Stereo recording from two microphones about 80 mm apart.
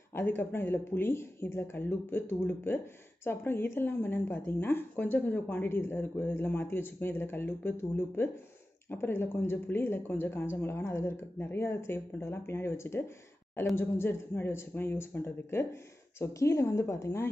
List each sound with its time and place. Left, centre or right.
0.1 s a woman's voice: left